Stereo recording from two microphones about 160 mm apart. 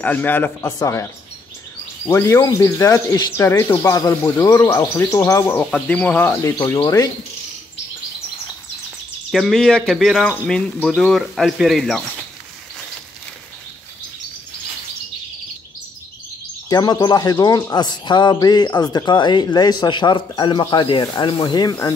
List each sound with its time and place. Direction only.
0.0 s speech: 10° left (ahead or behind)
2.0 s speech: 15° left (ahead or behind)
6.6 s speech: 25° left (ahead or behind)
9.3 s speech: centre (ahead or behind)
16.6 s speech: 25° left (ahead or behind)